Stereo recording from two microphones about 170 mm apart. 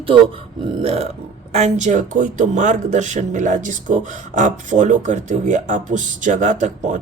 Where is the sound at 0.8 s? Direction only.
40° right (ahead or behind).